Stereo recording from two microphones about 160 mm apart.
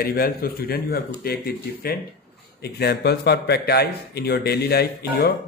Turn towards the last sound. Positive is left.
turn(degrees=75)  # may be behind; listen again after turning